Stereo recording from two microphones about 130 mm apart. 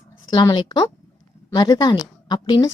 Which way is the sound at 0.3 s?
30° left (ahead or behind).